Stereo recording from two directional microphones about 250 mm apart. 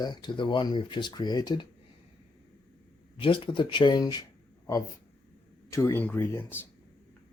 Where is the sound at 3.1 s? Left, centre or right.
Left.